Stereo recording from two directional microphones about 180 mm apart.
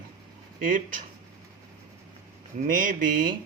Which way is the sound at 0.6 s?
50° right (ahead or behind).